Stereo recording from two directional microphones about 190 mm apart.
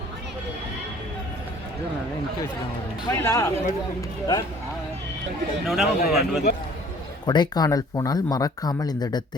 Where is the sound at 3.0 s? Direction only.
15° left (ahead or behind).